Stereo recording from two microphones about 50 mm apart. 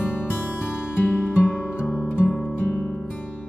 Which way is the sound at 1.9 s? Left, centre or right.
Right.